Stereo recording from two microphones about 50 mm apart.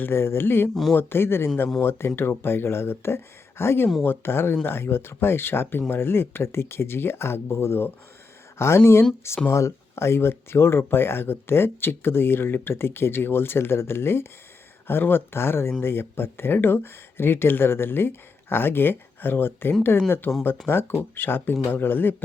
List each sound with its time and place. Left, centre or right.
0.0 s speech: left
8.5 s speech: left